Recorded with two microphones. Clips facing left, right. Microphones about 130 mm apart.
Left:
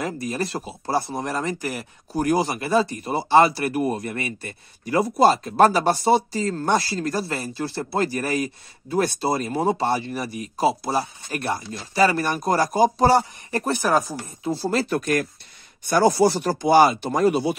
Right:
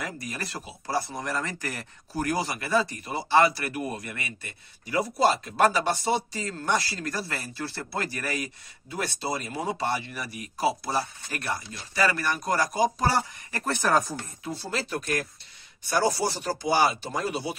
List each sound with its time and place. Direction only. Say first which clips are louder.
0.0 s speech: left 9 dB; 25° left (ahead or behind)
4.8 s speech: left 6 dB; 55° left (ahead or behind)
5.6 s speech: left 6 dB; 35° left (ahead or behind)
8.9 s speech: left 9 dB; 40° left (ahead or behind); by 13.7 s 25° left (ahead or behind)
13.7 s speech: left 1 dB; 10° left (ahead or behind)
14.1 s speech: left 7 dB; 30° left (ahead or behind)
14.9 s speech: left 7 dB; 70° left (ahead or behind)
15.9 s speech: left 8 dB; 60° left (ahead or behind)